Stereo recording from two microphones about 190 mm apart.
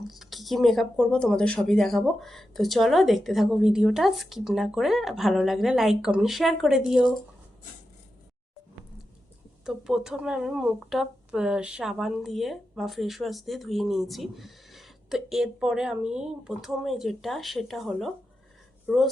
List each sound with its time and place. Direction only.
0.1 s speech: centre (ahead or behind)
9.6 s speech: centre (ahead or behind)